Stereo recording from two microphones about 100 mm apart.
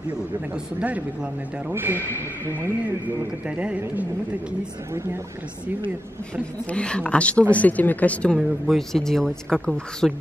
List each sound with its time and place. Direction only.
0.7 s a man's voice: 15° right (ahead or behind)
3.4 s speech: 10° right (ahead or behind)
6.6 s speech: 10° left (ahead or behind)
8.4 s speech: centre (ahead or behind)